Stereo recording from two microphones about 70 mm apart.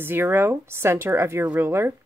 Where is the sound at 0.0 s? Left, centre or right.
Right.